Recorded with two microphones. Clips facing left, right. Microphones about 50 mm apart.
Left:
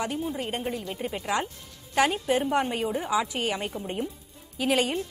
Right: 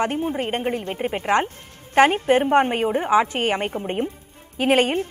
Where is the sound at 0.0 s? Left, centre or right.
Right.